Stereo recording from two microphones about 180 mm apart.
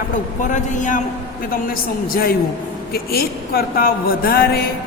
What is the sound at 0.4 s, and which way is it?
A man's voice, 45° left (ahead or behind).